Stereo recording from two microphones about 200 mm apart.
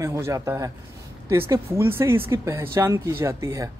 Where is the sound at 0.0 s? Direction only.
15° right (ahead or behind).